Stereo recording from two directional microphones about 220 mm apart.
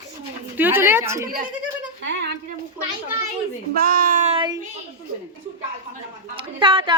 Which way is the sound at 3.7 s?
40° right (ahead or behind).